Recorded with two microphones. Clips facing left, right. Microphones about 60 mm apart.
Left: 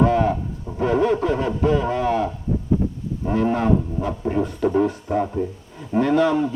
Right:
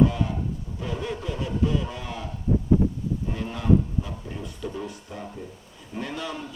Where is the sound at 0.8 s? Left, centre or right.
Left.